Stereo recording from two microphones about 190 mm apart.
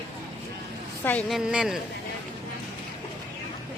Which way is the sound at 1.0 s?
10° left (ahead or behind).